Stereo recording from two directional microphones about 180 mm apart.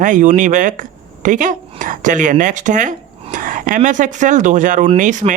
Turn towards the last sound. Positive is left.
turn(degrees=-45)  # may be behind; listen again after turning